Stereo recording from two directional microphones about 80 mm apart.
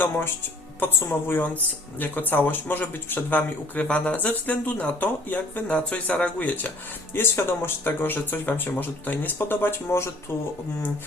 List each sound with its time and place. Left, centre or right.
0.8 s speech: left
7.1 s speech: left